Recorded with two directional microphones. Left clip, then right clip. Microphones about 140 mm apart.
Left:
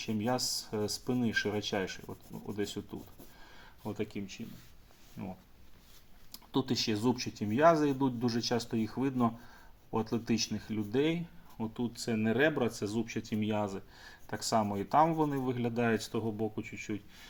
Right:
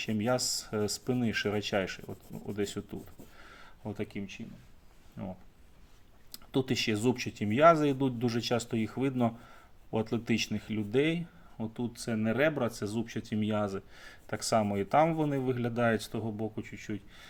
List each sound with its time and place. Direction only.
0.0 s speech: 50° right (ahead or behind)
3.8 s speech: 35° right (ahead or behind)
6.3 s speech: 50° right (ahead or behind)